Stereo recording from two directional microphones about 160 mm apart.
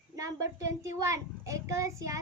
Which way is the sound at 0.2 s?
20° right (ahead or behind).